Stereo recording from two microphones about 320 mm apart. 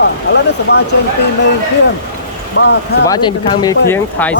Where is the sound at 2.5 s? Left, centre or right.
Left.